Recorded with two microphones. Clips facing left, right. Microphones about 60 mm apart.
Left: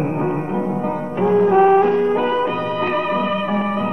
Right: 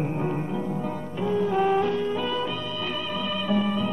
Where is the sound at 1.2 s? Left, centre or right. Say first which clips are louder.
Left 10 dB; left.